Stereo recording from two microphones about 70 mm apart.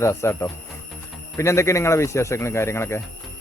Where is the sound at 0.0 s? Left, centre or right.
Left.